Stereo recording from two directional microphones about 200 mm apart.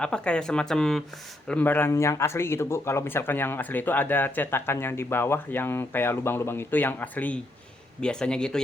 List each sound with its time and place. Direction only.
0.0 s speech: 5° left (ahead or behind)